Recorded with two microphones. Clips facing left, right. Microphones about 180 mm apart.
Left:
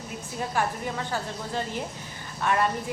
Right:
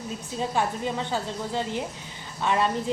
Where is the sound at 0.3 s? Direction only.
20° right (ahead or behind).